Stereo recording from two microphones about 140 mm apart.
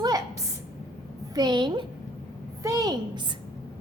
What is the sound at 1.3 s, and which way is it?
A woman's voice, 30° right (ahead or behind).